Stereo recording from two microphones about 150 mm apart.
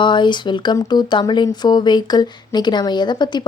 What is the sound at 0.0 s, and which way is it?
Speech, 30° left (ahead or behind).